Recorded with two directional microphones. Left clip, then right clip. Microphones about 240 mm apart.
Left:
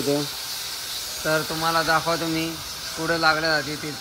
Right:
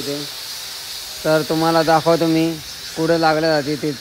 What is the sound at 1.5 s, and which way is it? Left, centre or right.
Speech, right.